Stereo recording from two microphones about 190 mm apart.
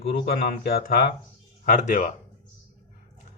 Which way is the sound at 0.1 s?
55° left (ahead or behind).